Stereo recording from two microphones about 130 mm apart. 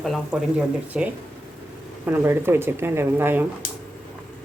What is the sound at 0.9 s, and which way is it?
Speech, 5° right (ahead or behind).